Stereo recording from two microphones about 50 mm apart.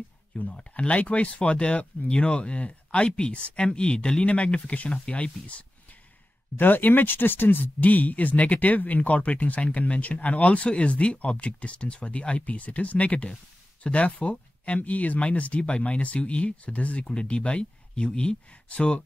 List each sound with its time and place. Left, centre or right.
0.5 s speech: left
6.5 s speech: left